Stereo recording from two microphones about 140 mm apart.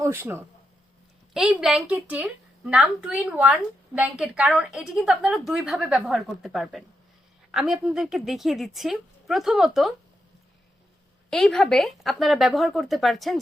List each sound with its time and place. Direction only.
0.0 s speech: 15° right (ahead or behind)
1.3 s a woman's voice: 5° right (ahead or behind)
11.3 s a woman's voice: 5° left (ahead or behind)